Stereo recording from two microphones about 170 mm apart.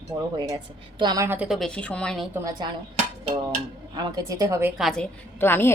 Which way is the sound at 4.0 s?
20° right (ahead or behind).